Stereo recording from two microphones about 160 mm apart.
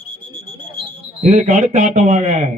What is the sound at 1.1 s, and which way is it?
Speech, 40° right (ahead or behind).